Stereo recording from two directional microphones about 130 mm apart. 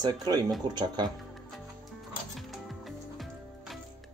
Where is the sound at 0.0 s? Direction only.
30° right (ahead or behind).